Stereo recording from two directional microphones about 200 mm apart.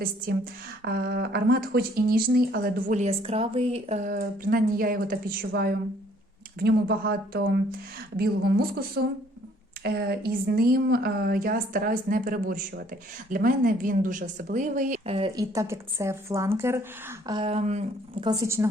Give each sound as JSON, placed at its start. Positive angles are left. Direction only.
{"t": 0.9, "sound": "speech", "side_deg": -55}
{"t": 6.6, "sound": "a woman's voice", "side_deg": -50}
{"t": 15.5, "sound": "speech", "side_deg": -15}
{"t": 17.2, "sound": "speech", "side_deg": -25}